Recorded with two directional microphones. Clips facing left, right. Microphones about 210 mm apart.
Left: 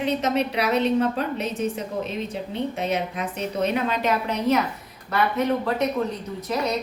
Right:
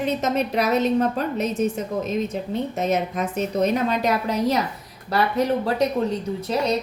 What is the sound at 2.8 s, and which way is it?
A woman's voice, 45° right (ahead or behind).